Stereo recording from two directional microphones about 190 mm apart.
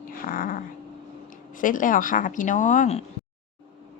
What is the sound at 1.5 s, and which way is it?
A woman's voice, 45° left (ahead or behind).